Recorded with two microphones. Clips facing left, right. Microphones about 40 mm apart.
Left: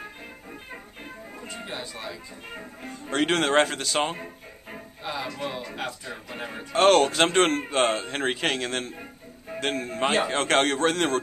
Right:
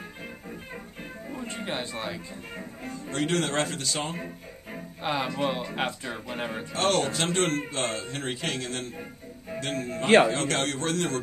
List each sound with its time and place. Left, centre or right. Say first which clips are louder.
1.7 s speech: right 4 dB; right
2.5 s speech: even; centre
2.9 s speech: left 3 dB; left
5.0 s speech: right 4 dB; right
6.2 s speech: right 3 dB; centre
6.7 s speech: left 8 dB; left